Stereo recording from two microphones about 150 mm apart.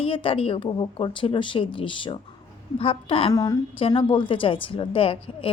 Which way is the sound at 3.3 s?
25° left (ahead or behind).